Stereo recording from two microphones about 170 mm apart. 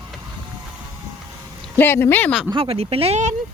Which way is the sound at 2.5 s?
35° right (ahead or behind).